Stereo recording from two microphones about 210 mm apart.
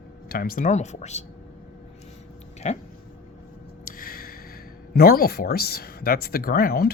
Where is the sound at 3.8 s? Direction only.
45° left (ahead or behind).